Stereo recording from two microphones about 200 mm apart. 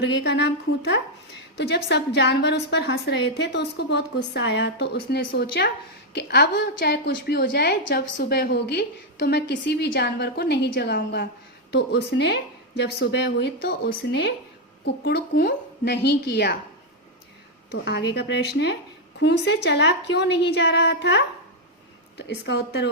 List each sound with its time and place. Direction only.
0.0 s a woman's voice: 60° left (ahead or behind)
17.7 s a woman's voice: 60° left (ahead or behind)
22.2 s a woman's voice: 60° left (ahead or behind)